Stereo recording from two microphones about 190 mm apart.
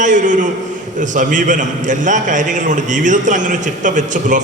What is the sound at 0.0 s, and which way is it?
A man's voice, 40° right (ahead or behind).